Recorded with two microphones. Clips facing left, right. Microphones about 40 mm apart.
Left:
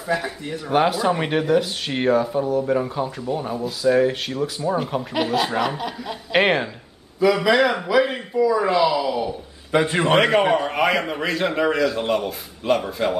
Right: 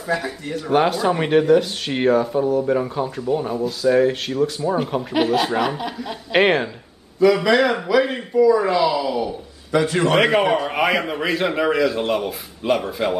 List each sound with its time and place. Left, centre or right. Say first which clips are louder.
0.1 s speech: right 1 dB; centre
9.7 s a man's voice: right 1 dB; left
10.1 s speech: left 1 dB; centre